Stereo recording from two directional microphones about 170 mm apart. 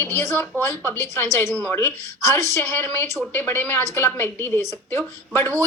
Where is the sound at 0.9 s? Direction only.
15° left (ahead or behind).